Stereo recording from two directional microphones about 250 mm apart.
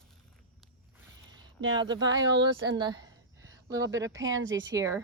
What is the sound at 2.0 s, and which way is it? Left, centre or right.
Speech, right.